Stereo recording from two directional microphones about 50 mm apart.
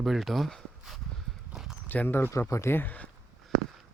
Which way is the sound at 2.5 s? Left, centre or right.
Left.